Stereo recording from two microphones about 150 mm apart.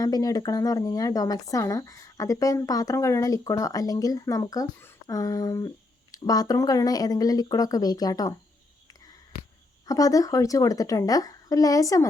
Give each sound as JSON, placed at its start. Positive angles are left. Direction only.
{"t": 0.0, "sound": "speech", "side_deg": 25}
{"t": 9.8, "sound": "speech", "side_deg": 25}